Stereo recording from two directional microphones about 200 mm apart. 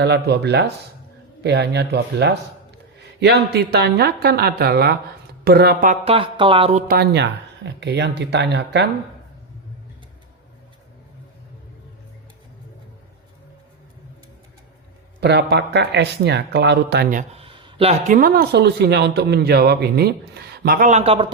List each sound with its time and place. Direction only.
0.0 s speech: 60° right (ahead or behind)
6.1 s speech: 25° right (ahead or behind)
6.8 s speech: 50° right (ahead or behind)
15.2 s speech: 55° right (ahead or behind)
17.1 s speech: 40° right (ahead or behind)
17.4 s a sound: 25° right (ahead or behind)
18.1 s speech: 45° right (ahead or behind); by 21.3 s 25° right (ahead or behind)